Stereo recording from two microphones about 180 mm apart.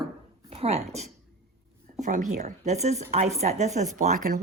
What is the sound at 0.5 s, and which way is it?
A woman's voice, 35° right (ahead or behind).